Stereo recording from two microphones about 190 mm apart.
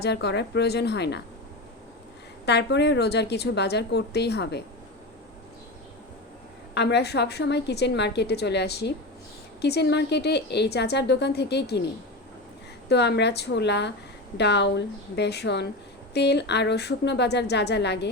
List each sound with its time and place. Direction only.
0.0 s a woman's voice: 60° left (ahead or behind)
2.5 s a woman's voice: 65° left (ahead or behind)
6.7 s a woman's voice: 60° left (ahead or behind)
12.9 s a woman's voice: 60° left (ahead or behind)